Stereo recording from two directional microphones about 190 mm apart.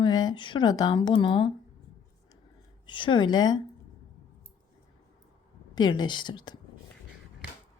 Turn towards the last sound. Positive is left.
turn(degrees=25)  # may be behind; listen again after turning